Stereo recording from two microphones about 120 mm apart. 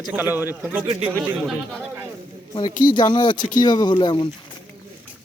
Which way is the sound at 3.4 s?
90° left.